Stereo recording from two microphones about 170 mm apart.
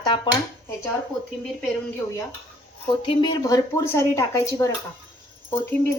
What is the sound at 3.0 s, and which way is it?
Speech, 30° left (ahead or behind).